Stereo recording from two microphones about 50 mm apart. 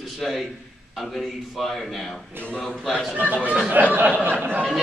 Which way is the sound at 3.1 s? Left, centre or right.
Right.